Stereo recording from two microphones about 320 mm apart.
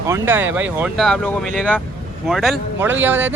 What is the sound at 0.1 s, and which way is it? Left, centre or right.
Speech, centre.